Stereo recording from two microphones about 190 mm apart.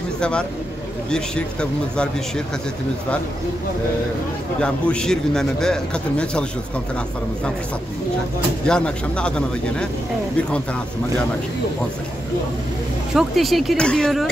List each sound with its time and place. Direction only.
0.2 s a man's voice: 5° left (ahead or behind)
4.6 s a man's voice: 5° left (ahead or behind)
8.6 s a man's voice: 5° left (ahead or behind)
13.1 s a man's voice: centre (ahead or behind)